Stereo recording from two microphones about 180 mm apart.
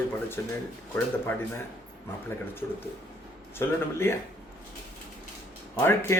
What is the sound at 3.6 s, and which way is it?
Speech, 15° left (ahead or behind).